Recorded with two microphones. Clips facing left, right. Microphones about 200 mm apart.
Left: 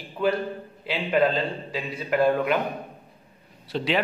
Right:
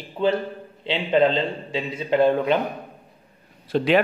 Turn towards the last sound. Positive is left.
turn(degrees=-50)  # may be behind; listen again after turning